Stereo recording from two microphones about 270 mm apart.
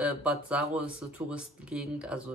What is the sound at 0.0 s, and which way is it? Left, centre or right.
Speech, centre.